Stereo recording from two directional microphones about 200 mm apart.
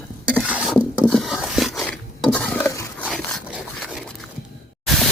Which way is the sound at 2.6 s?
15° left (ahead or behind).